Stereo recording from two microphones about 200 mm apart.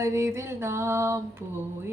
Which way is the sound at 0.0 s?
15° right (ahead or behind).